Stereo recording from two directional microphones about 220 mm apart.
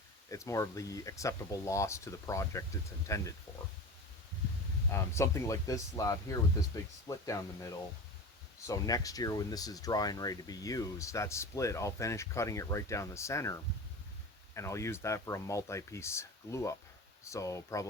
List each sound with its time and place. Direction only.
0.3 s speech: 15° left (ahead or behind)
4.9 s speech: 10° left (ahead or behind)
8.6 s speech: 15° left (ahead or behind)